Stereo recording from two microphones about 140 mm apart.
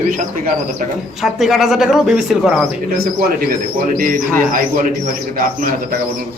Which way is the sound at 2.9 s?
90° right.